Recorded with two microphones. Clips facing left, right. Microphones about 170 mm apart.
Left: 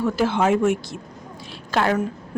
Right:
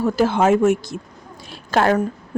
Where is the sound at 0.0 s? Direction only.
40° right (ahead or behind).